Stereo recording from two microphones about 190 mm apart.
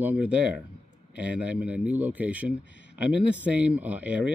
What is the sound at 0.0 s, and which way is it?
Speech, 5° right (ahead or behind).